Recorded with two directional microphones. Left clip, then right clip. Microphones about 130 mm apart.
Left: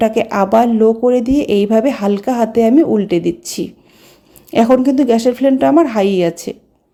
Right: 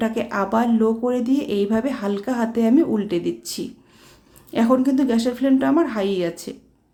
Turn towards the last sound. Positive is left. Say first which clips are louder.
# left 8 dB
turn(degrees=50)  # may be behind; listen again after turning